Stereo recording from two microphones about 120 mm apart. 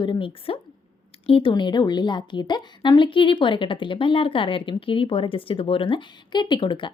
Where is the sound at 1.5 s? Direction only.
40° left (ahead or behind).